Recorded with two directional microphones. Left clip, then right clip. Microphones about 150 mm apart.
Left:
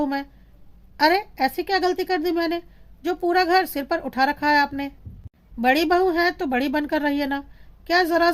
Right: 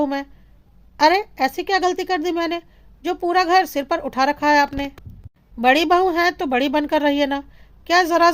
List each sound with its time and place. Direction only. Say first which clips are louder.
0.0 s speech: right 3 dB; 15° right (ahead or behind)